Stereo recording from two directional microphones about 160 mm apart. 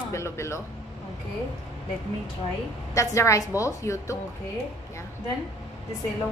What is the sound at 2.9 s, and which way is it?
A woman's voice, 20° left (ahead or behind).